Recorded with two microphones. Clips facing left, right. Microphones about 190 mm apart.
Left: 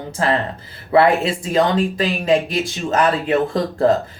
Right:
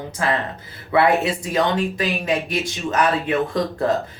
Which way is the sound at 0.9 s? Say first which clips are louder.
Left 3 dB; 30° left (ahead or behind).